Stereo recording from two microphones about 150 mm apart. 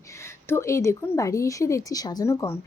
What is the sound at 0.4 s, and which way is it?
A woman's voice, 20° left (ahead or behind).